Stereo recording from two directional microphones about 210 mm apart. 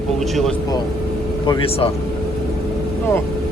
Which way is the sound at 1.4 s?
25° left (ahead or behind).